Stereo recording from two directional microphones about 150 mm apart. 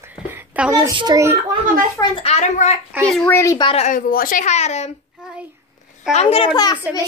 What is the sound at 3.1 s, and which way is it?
Speech, 15° left (ahead or behind).